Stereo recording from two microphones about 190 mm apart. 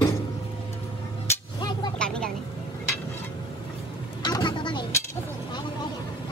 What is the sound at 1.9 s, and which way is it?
Vehicle, 5° left (ahead or behind).